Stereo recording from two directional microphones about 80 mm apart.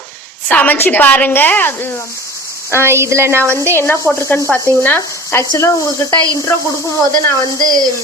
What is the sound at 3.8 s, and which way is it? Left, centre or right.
A woman's voice, left.